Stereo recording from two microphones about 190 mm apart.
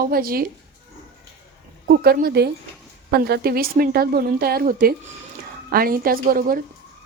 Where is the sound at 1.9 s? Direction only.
55° right (ahead or behind).